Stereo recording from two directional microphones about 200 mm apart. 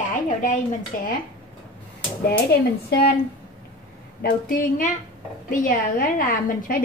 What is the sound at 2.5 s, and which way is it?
Speech, 55° left (ahead or behind).